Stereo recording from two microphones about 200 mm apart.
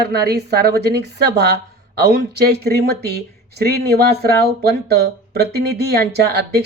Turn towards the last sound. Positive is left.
turn(degrees=-55)  # may be behind; listen again after turning